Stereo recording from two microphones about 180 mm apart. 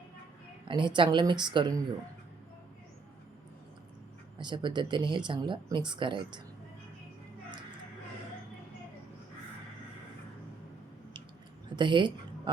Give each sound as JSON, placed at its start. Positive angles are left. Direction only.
{"t": 0.7, "sound": "speech", "side_deg": -25}
{"t": 4.4, "sound": "speech", "side_deg": -25}
{"t": 11.8, "sound": "speech", "side_deg": -25}